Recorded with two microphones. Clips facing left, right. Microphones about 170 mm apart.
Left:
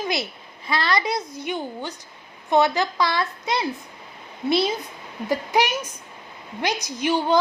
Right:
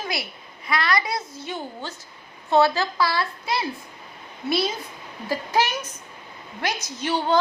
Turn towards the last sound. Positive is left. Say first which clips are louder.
# left 2 dB
turn(degrees=15)  # may be behind; listen again after turning